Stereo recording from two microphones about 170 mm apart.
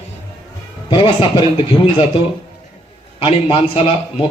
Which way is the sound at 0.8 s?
30° left (ahead or behind).